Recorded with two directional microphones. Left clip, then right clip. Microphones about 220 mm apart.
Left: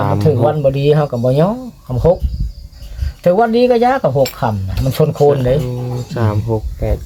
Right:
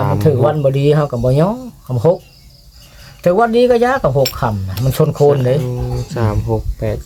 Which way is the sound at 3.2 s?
10° right (ahead or behind).